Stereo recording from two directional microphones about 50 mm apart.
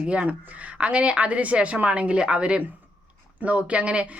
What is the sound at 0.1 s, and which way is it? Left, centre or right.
Speech, right.